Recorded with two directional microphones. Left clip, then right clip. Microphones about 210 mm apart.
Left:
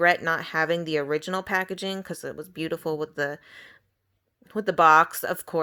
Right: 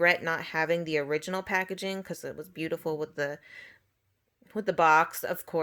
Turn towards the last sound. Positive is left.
turn(degrees=25)  # may be behind; listen again after turning